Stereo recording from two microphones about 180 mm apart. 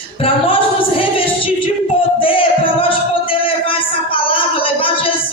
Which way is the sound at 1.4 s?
30° left (ahead or behind).